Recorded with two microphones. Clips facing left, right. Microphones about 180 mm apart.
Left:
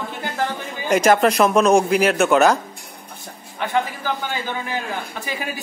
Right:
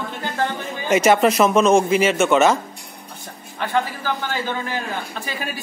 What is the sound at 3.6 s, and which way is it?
A man's voice, 15° left (ahead or behind).